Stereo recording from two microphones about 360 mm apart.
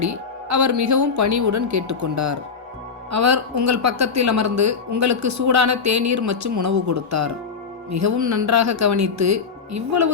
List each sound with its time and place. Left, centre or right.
0.0 s speech: right